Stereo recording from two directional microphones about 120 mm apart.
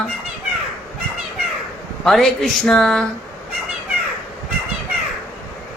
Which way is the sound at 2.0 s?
Centre (ahead or behind).